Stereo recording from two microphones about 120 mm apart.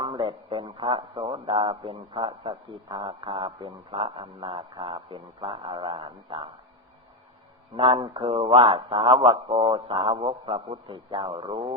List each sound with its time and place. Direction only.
0.0 s a man's voice: 45° right (ahead or behind)
7.8 s a man's voice: 45° right (ahead or behind)